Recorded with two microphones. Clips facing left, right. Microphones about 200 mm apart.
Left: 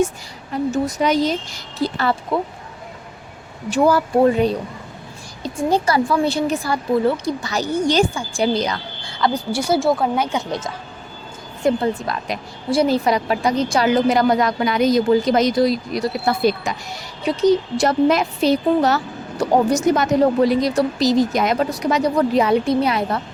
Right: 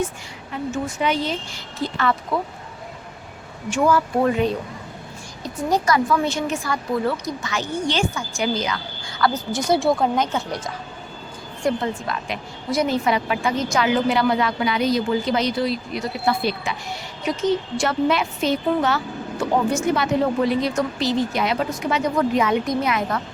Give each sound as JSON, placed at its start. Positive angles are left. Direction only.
{"t": 0.5, "sound": "a woman's voice", "side_deg": 40}
{"t": 3.7, "sound": "a woman's voice", "side_deg": 35}
{"t": 9.3, "sound": "speech", "side_deg": 10}
{"t": 10.3, "sound": "speech", "side_deg": 25}
{"t": 11.6, "sound": "a woman's voice", "side_deg": 35}